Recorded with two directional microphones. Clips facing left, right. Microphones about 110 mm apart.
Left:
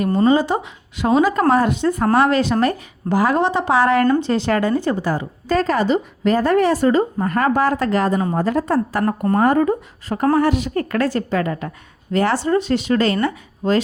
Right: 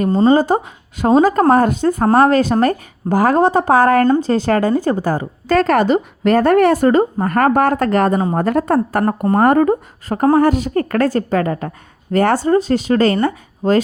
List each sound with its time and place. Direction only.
0.3 s speech: 45° right (ahead or behind)
5.5 s speech: 65° right (ahead or behind); by 13.8 s 45° right (ahead or behind)